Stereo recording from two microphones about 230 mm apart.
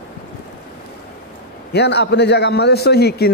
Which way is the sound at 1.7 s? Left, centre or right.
Left.